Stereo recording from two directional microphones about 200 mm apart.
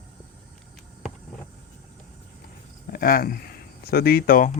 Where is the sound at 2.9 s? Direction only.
45° left (ahead or behind).